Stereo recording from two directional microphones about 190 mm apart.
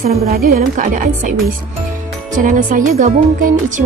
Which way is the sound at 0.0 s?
55° right (ahead or behind).